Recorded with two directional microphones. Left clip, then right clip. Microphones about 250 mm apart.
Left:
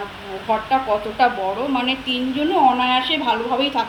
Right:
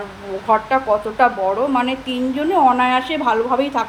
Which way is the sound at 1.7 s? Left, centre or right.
Centre.